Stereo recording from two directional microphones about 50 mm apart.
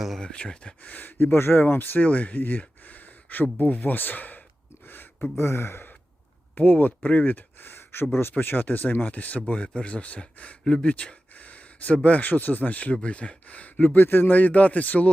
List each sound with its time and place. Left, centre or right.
0.2 s speech: centre
0.8 s speech: left
2.0 s speech: left
4.9 s a sound: left
5.4 s speech: left
6.6 s speech: left
10.7 s speech: centre
10.9 s a sound: left
12.0 s speech: left
13.9 s speech: left